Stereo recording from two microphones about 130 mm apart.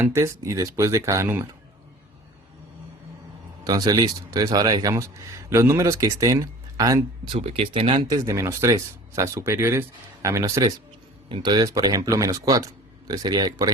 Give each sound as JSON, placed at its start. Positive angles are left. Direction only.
{"t": 0.0, "sound": "speech", "side_deg": -20}
{"t": 3.6, "sound": "speech", "side_deg": -30}
{"t": 7.3, "sound": "speech", "side_deg": -50}
{"t": 8.0, "sound": "speech", "side_deg": -25}
{"t": 11.3, "sound": "speech", "side_deg": -40}